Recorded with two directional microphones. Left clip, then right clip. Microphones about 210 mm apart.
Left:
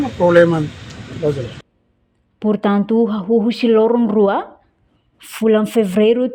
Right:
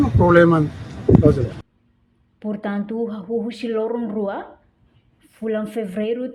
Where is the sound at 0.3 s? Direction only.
25° right (ahead or behind).